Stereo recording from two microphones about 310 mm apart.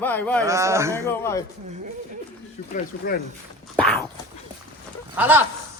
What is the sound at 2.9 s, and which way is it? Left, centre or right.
Speech, left.